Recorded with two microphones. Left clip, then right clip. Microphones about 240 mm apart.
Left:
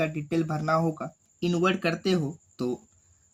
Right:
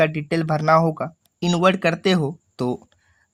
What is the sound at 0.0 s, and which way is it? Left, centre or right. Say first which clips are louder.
Speech: right 8 dB; right.